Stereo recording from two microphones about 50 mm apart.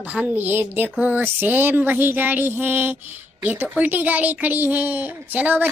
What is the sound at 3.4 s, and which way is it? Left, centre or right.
Speech, right.